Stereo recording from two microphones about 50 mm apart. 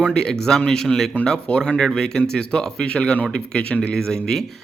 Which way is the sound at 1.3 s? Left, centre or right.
Centre.